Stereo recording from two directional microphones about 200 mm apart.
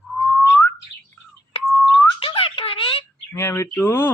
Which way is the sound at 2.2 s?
25° left (ahead or behind).